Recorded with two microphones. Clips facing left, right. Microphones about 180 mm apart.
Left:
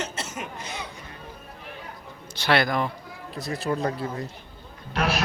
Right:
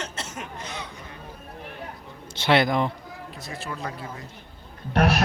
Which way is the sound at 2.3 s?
25° right (ahead or behind).